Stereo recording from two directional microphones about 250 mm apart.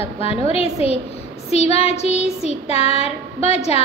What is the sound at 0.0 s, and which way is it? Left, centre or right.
A woman's voice, left.